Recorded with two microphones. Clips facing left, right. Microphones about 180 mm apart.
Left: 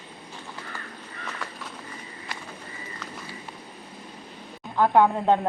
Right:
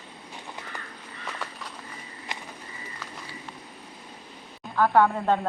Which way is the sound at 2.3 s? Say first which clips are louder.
Right 1 dB; 20° right (ahead or behind).